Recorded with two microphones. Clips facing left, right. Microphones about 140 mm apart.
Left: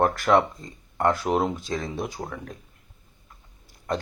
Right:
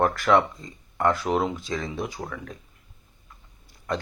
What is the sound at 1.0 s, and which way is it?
Speech, centre (ahead or behind).